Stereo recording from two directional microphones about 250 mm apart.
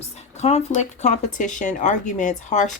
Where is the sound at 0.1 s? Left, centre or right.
Left.